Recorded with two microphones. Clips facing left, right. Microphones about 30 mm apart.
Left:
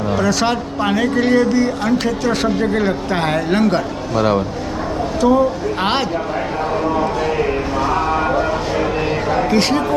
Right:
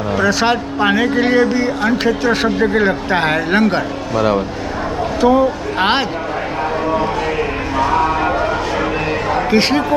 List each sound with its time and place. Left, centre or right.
0.2 s speech: centre
5.2 s speech: right
9.5 s speech: right